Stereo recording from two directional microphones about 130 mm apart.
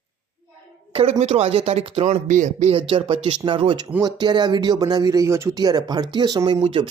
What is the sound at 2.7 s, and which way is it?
Speech, 45° right (ahead or behind).